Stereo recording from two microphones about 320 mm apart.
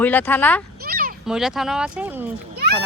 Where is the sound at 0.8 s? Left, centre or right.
Right.